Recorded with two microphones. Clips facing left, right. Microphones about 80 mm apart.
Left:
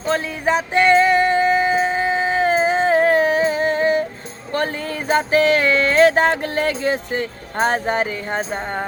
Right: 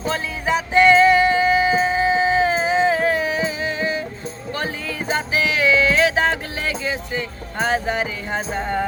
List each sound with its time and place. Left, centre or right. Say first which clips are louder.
0.1 s music: left 4 dB; left